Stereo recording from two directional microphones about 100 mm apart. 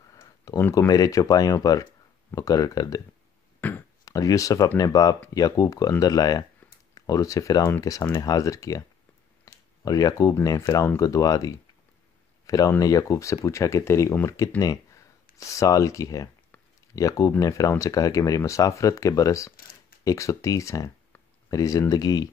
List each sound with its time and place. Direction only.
0.6 s speech: 25° left (ahead or behind)
0.8 s speech: 40° left (ahead or behind)
3.6 s a sound: 20° left (ahead or behind)
4.0 s speech: 35° left (ahead or behind)
9.4 s a sound: 35° left (ahead or behind)
10.4 s speech: 35° left (ahead or behind)